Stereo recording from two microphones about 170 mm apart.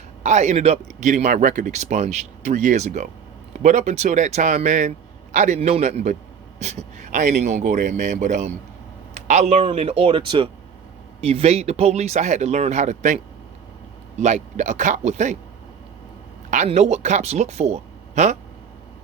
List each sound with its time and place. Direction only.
0.2 s speech: 45° right (ahead or behind)
14.2 s speech: 45° right (ahead or behind)
16.5 s speech: 45° right (ahead or behind)